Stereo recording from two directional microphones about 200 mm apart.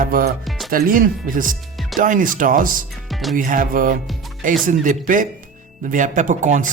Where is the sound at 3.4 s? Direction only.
45° right (ahead or behind).